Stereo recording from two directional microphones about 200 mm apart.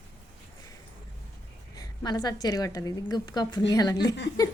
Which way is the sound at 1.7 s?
20° left (ahead or behind).